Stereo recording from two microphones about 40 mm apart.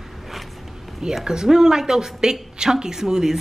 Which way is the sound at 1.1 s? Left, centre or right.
Centre.